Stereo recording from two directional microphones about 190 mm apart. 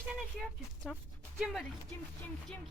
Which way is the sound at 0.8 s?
Centre (ahead or behind).